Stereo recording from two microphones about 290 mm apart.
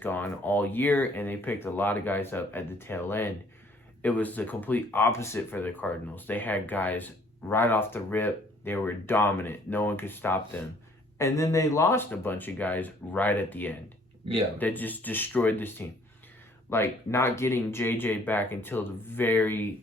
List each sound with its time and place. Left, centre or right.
0.0 s speech: centre